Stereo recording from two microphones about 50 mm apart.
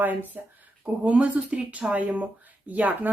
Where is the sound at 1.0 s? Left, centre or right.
Right.